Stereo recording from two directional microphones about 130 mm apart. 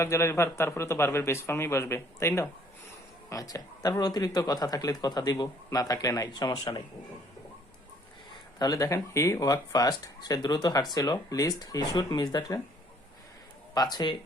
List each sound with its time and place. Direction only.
0.0 s speech: 20° left (ahead or behind)
8.5 s speech: 30° left (ahead or behind)
13.7 s speech: 30° left (ahead or behind)